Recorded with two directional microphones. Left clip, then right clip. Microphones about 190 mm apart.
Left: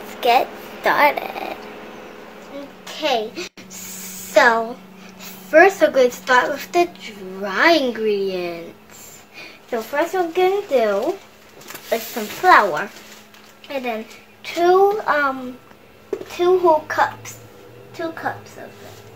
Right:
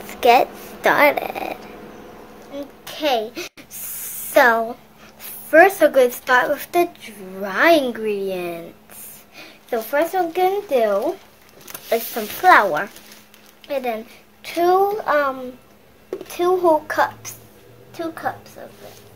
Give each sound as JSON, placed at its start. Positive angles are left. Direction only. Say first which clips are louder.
{"t": 0.2, "sound": "speech", "louder": "right 2 dB", "side_deg": -40}
{"t": 2.8, "sound": "a child's voice", "louder": "even", "side_deg": -35}
{"t": 9.7, "sound": "speech", "louder": "right 1 dB", "side_deg": -40}
{"t": 11.9, "sound": "speech", "louder": "right 1 dB", "side_deg": -40}
{"t": 13.7, "sound": "a child's voice", "louder": "right 1 dB", "side_deg": -50}
{"t": 16.3, "sound": "a child's voice", "louder": "left 1 dB", "side_deg": -55}